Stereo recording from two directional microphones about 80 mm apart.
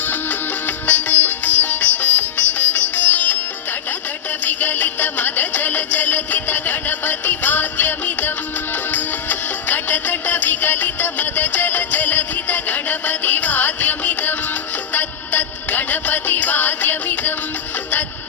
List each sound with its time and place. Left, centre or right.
0.0 s music: left
0.9 s sitar: left
4.4 s music: left